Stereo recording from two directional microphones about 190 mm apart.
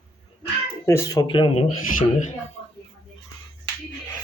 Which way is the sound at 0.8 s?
15° left (ahead or behind).